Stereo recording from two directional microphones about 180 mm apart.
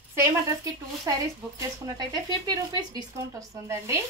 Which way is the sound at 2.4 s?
20° right (ahead or behind).